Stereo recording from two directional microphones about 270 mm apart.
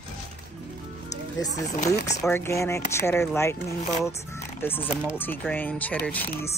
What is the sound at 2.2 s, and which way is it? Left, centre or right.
Speech, centre.